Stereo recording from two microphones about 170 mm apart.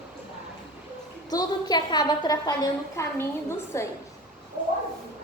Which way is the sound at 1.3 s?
25° left (ahead or behind).